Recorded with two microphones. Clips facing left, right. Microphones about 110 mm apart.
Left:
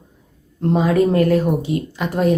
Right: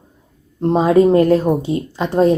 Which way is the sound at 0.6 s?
30° right (ahead or behind).